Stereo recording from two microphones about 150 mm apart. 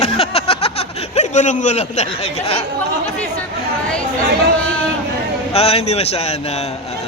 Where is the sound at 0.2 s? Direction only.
40° left (ahead or behind).